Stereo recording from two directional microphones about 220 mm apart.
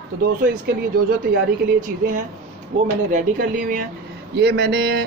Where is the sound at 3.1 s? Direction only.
35° right (ahead or behind).